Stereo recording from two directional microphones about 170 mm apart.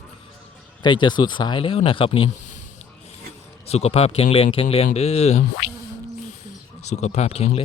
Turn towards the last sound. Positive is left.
turn(degrees=40)  # may be behind; listen again after turning